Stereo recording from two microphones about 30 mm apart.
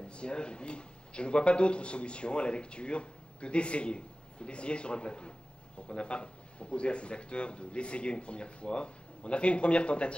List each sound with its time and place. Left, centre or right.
0.1 s speech: left